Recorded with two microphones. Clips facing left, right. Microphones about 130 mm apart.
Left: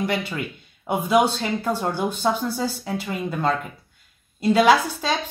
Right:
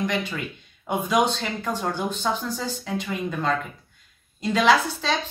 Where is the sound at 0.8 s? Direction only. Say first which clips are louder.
Left 3 dB; 10° left (ahead or behind).